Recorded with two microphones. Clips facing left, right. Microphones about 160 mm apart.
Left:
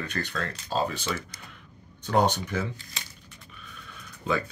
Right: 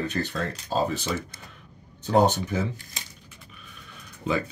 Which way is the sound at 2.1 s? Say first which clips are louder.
Right 3 dB; 35° right (ahead or behind).